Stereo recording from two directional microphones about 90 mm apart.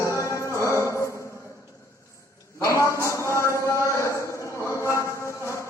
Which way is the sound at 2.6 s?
35° left (ahead or behind).